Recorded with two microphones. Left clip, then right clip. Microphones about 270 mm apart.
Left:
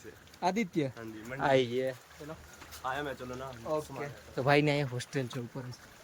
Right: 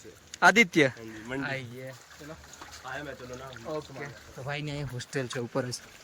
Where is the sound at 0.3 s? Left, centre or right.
Right.